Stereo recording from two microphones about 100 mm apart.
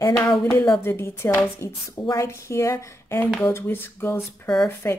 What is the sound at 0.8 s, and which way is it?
Speech, 25° left (ahead or behind).